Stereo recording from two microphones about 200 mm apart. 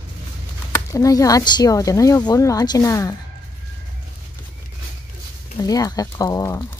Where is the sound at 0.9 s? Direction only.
15° left (ahead or behind).